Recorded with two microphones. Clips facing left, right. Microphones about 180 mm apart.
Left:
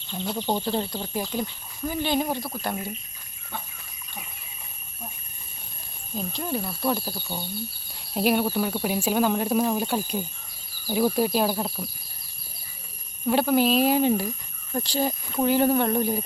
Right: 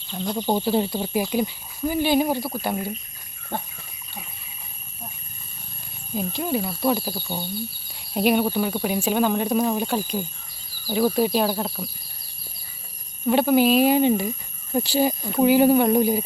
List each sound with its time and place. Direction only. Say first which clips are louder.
0.1 s speech: right 3 dB; centre (ahead or behind)
3.5 s speech: right 7 dB; 50° right (ahead or behind)
6.1 s speech: right 4 dB; 5° right (ahead or behind)
13.2 s speech: right 3 dB; centre (ahead or behind)